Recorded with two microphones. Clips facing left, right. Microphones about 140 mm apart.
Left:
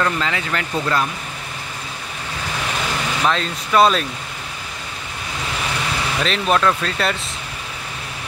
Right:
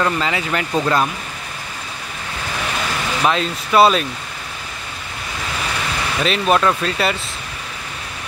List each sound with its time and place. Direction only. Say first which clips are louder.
0.0 s speech: right 2 dB; 15° right (ahead or behind)
3.3 s speech: right 3 dB; 10° right (ahead or behind)
6.2 s speech: right 2 dB; 10° right (ahead or behind)